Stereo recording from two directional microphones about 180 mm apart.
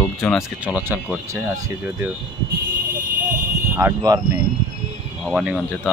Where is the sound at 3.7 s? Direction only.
20° right (ahead or behind).